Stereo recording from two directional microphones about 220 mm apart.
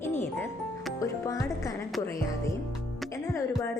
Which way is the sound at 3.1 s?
15° left (ahead or behind).